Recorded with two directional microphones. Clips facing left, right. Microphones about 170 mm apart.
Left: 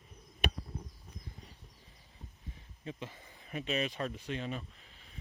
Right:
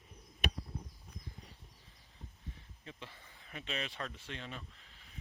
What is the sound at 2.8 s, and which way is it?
Speech, 15° left (ahead or behind).